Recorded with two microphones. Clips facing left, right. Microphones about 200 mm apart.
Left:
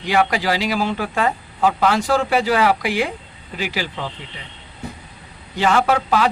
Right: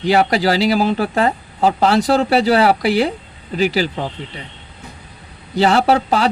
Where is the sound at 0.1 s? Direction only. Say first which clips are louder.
Right 4 dB; 35° right (ahead or behind).